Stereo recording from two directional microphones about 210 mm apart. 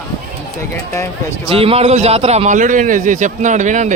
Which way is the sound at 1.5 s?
25° right (ahead or behind).